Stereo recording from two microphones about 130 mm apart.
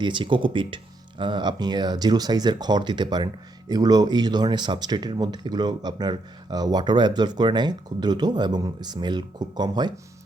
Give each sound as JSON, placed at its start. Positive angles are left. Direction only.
{"t": 0.0, "sound": "speech", "side_deg": -40}